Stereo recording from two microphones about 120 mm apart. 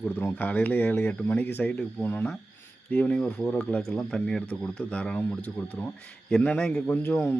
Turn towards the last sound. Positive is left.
turn(degrees=15)  # may be behind; listen again after turning